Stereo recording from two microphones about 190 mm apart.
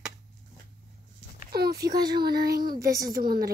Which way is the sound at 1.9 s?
20° right (ahead or behind).